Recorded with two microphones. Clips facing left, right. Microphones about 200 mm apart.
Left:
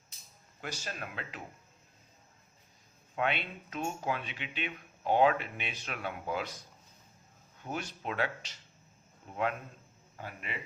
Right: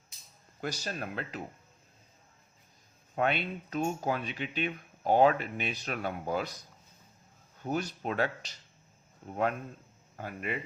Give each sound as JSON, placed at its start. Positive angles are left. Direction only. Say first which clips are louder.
{"t": 0.6, "sound": "speech", "louder": "right 5 dB", "side_deg": -40}
{"t": 3.2, "sound": "speech", "louder": "right 3 dB", "side_deg": -40}
{"t": 10.2, "sound": "speech", "louder": "right 6 dB", "side_deg": -45}